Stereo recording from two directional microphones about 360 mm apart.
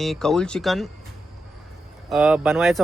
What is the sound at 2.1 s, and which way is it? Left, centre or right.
Speech, centre.